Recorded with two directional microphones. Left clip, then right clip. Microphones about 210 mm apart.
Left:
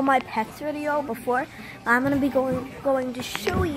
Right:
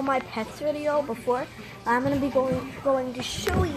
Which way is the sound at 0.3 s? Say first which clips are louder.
Left 1 dB; 5° left (ahead or behind).